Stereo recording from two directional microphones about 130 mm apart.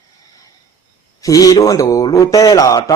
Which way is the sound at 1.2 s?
25° left (ahead or behind).